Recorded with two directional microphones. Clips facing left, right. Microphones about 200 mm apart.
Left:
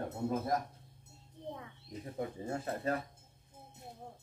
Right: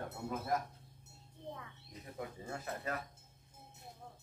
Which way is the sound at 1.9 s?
30° left (ahead or behind).